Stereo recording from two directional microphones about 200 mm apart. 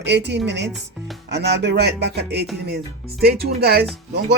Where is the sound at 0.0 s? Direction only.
55° right (ahead or behind).